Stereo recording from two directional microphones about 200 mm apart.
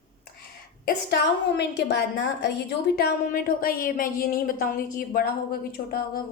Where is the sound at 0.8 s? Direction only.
55° left (ahead or behind).